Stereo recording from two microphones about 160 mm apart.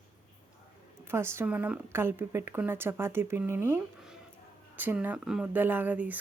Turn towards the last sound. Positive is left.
turn(degrees=-10)  # may be behind; listen again after turning